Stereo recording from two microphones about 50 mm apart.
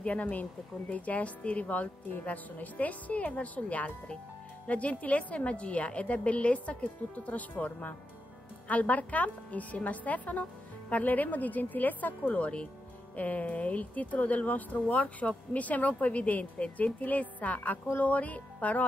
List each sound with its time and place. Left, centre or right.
0.0 s a woman's voice: left